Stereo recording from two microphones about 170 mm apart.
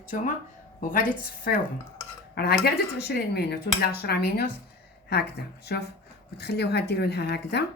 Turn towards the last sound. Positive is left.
turn(degrees=75)  # may be behind; listen again after turning